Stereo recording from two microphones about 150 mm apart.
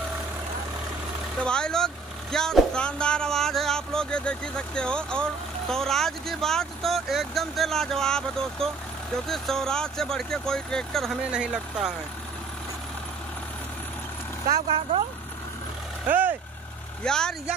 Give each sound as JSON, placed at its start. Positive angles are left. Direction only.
{"t": 1.4, "sound": "speech", "side_deg": 5}
{"t": 14.7, "sound": "speech", "side_deg": -40}
{"t": 16.1, "sound": "speech", "side_deg": -10}
{"t": 17.0, "sound": "speech", "side_deg": 5}